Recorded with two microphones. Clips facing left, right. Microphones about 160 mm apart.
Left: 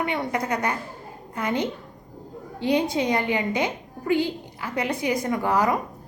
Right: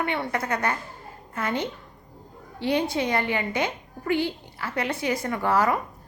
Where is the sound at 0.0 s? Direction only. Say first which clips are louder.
Left 1 dB; 15° left (ahead or behind).